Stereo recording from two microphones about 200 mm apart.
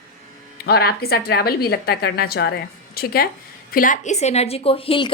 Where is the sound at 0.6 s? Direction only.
50° left (ahead or behind).